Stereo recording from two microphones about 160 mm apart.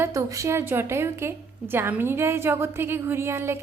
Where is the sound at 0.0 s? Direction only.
20° right (ahead or behind).